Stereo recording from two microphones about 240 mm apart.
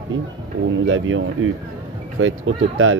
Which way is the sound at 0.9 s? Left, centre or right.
Right.